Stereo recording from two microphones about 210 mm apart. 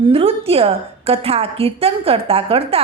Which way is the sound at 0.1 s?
25° right (ahead or behind).